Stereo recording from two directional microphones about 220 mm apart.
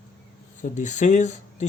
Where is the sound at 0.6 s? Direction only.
35° left (ahead or behind).